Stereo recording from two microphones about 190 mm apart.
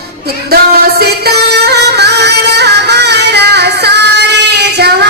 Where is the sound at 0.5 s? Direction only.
55° right (ahead or behind).